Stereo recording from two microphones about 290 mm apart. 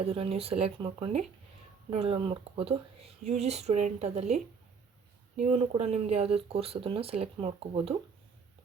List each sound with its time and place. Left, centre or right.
0.0 s speech: centre
5.4 s speech: right